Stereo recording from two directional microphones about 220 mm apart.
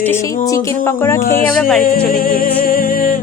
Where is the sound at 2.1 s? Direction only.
40° left (ahead or behind).